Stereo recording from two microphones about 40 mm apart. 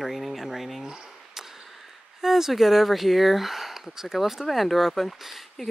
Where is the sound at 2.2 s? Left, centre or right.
Centre.